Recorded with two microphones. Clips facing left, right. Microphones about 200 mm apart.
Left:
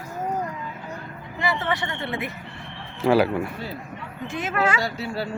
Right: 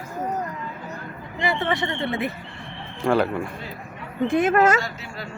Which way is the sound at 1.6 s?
25° right (ahead or behind).